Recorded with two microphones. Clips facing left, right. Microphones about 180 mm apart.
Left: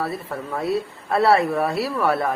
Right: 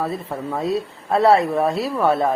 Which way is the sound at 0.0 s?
15° right (ahead or behind).